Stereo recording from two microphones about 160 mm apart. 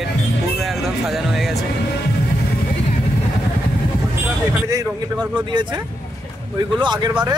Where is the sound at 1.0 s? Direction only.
Centre (ahead or behind).